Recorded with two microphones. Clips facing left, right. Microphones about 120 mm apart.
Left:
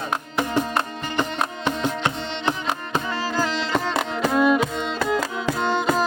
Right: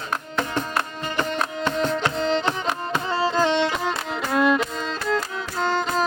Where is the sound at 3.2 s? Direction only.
25° right (ahead or behind).